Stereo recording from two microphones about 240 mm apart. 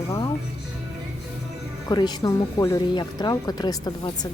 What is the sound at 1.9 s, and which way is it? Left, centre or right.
Speech, centre.